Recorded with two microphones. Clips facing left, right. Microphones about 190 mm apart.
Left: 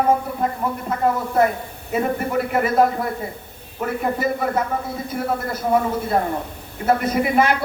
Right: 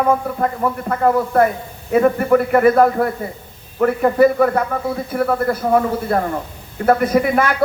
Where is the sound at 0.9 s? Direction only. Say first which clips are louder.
Right 4 dB; 60° right (ahead or behind).